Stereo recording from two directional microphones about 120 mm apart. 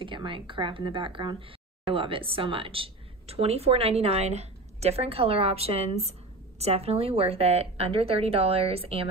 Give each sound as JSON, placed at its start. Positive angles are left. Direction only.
{"t": 0.0, "sound": "speech", "side_deg": -45}